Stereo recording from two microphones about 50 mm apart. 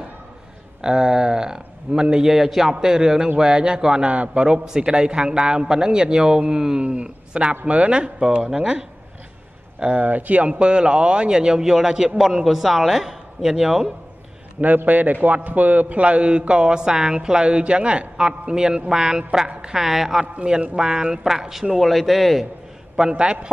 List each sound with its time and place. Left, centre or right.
0.8 s a man's voice: centre
9.8 s a man's voice: right; by 13.9 s centre
14.6 s a man's voice: right; by 20.2 s centre
20.3 s a man's voice: centre
22.9 s a man's voice: centre